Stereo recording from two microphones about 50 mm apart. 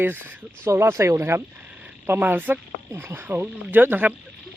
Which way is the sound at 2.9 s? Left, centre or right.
Right.